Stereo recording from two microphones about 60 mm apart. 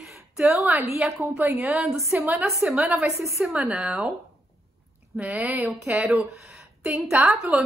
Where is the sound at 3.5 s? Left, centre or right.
Centre.